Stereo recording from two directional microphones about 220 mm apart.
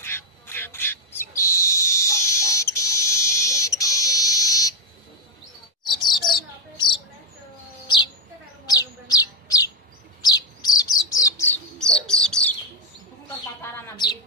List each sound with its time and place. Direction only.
0.0 s bird: 10° left (ahead or behind)
1.7 s a sound: 15° left (ahead or behind)
5.9 s bird: 20° left (ahead or behind)
8.6 s chirp: 15° left (ahead or behind)
10.2 s bird: 20° left (ahead or behind)
11.8 s bird: 5° left (ahead or behind)
13.6 s bird: 10° left (ahead or behind)